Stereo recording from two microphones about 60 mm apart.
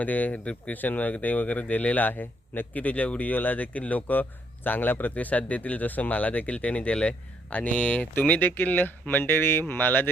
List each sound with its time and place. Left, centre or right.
0.0 s speech: left